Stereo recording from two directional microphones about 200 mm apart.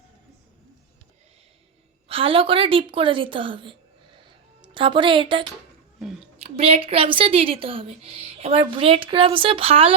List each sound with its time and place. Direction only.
2.0 s a woman's voice: 25° right (ahead or behind)
4.3 s music: 25° right (ahead or behind)
6.0 s a sound: centre (ahead or behind)
6.4 s a woman's voice: 30° right (ahead or behind)